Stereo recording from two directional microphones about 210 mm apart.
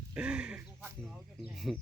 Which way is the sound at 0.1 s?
5° right (ahead or behind).